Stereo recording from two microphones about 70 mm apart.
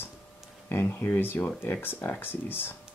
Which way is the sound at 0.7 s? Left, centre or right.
Left.